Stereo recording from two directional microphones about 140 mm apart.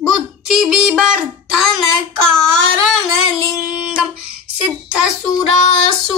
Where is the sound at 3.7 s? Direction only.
5° right (ahead or behind).